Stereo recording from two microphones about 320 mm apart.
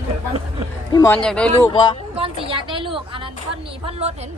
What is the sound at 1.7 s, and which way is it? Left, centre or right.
Speech, centre.